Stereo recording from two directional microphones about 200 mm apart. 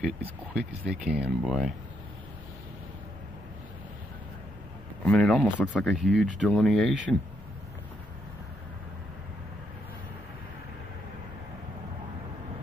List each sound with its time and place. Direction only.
0.0 s speech: 5° right (ahead or behind)
5.0 s speech: 5° left (ahead or behind)